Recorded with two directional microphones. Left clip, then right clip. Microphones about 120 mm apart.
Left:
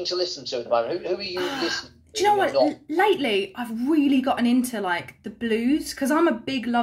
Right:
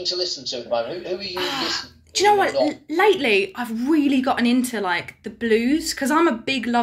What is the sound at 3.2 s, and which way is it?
A woman's voice, 25° left (ahead or behind).